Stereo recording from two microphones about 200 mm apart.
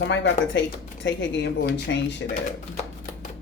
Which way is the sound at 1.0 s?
60° left (ahead or behind).